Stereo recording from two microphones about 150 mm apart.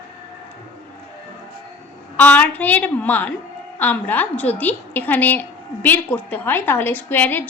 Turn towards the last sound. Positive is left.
turn(degrees=15)  # may be behind; listen again after turning